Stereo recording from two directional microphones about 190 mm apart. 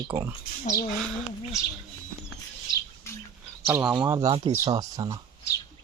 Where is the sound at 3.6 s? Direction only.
10° right (ahead or behind).